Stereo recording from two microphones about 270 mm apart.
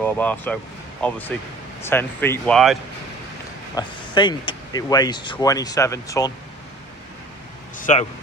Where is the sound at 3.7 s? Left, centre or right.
Centre.